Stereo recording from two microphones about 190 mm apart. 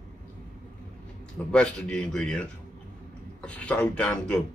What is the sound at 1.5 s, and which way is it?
Speech, 5° left (ahead or behind).